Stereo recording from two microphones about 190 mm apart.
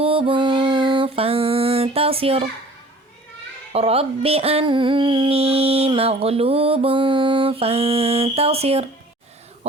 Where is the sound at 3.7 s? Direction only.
30° right (ahead or behind).